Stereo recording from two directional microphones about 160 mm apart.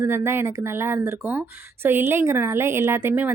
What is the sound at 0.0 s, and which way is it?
A woman's voice, 15° right (ahead or behind).